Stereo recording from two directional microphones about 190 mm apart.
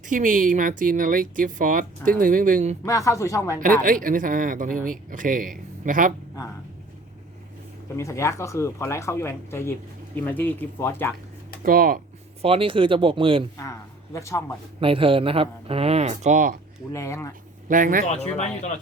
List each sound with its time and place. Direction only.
0.1 s speech: 45° right (ahead or behind)
2.8 s speech: 15° left (ahead or behind)
3.8 s speech: 45° right (ahead or behind)
7.9 s speech: 15° left (ahead or behind)
11.6 s speech: 50° right (ahead or behind)
12.4 s speech: 30° right (ahead or behind)
13.6 s a man's voice: 15° left (ahead or behind)
14.8 s speech: 30° right (ahead or behind)
16.9 s speech: 15° left (ahead or behind)
17.7 s speech: 45° right (ahead or behind)
18.3 s speech: 35° left (ahead or behind)